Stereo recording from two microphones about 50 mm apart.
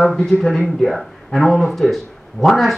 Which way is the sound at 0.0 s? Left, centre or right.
Centre.